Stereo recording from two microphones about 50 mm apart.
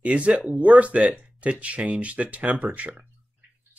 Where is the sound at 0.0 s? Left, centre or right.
Right.